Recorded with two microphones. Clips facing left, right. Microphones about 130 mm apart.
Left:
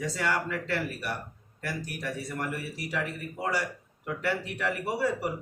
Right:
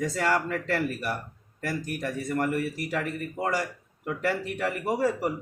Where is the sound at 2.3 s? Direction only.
55° right (ahead or behind).